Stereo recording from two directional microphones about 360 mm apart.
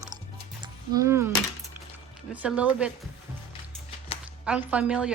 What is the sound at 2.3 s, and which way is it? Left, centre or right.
Speech, centre.